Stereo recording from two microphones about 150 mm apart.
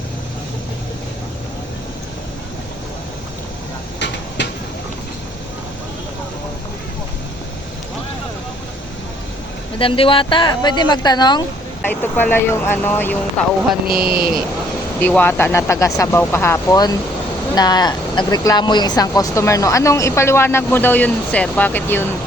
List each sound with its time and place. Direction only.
9.7 s speech: 35° left (ahead or behind)
11.8 s speech: 10° left (ahead or behind)
13.9 s speech: 90° right
15.0 s speech: 10° left (ahead or behind)